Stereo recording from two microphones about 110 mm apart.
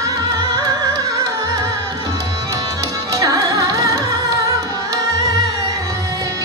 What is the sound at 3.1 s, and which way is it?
Music, 30° right (ahead or behind).